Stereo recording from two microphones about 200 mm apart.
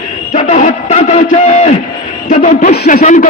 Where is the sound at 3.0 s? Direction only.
40° left (ahead or behind).